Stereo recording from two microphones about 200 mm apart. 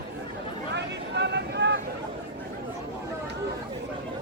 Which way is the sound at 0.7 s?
60° right (ahead or behind).